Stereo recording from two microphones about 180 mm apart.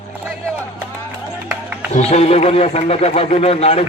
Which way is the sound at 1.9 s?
35° left (ahead or behind).